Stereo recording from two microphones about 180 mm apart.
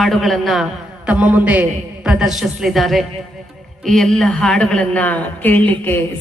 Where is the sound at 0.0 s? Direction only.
Centre (ahead or behind).